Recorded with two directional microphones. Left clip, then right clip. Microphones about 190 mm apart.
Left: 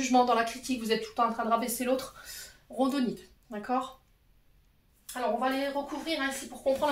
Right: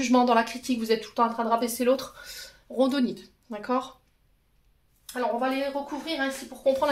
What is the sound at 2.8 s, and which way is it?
Speech, 50° right (ahead or behind).